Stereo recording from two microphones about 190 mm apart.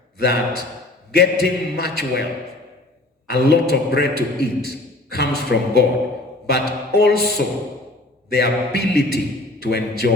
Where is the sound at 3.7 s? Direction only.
60° left (ahead or behind).